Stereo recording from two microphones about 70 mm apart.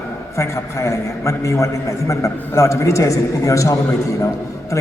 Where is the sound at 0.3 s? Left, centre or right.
Left.